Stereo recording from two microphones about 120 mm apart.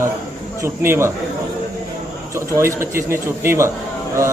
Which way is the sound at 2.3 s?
25° right (ahead or behind).